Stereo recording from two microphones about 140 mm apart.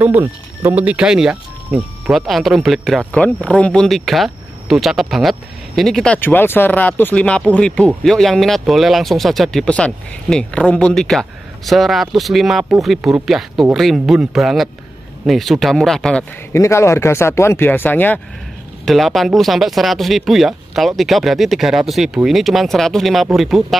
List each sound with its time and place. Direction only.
0.0 s speech: 15° right (ahead or behind); by 16.3 s 5° left (ahead or behind)
16.5 s speech: 20° left (ahead or behind)
18.9 s speech: centre (ahead or behind)